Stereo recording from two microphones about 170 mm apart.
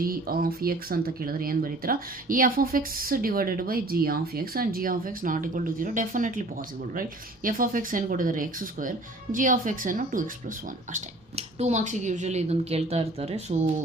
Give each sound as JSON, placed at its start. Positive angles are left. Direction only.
{"t": 0.0, "sound": "speech", "side_deg": -60}
{"t": 7.4, "sound": "speech", "side_deg": -55}
{"t": 10.9, "sound": "speech", "side_deg": -40}